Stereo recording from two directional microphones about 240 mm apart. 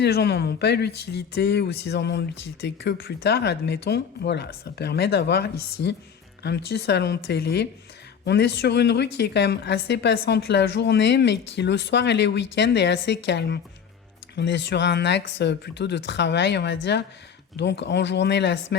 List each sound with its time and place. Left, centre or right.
0.0 s speech: left
6.7 s speech: left